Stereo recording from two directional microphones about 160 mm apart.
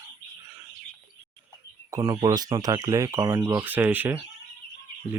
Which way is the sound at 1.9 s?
25° right (ahead or behind).